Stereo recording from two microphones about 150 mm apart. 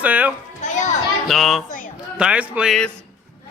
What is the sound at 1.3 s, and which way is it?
Speech, centre (ahead or behind).